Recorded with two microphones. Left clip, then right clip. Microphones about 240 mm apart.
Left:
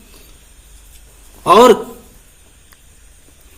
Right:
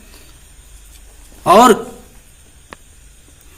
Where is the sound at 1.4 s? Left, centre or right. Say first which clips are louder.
Left 1 dB; right.